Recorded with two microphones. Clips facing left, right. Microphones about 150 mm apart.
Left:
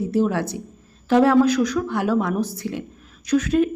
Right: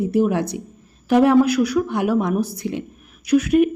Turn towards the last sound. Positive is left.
turn(degrees=-10)  # may be behind; listen again after turning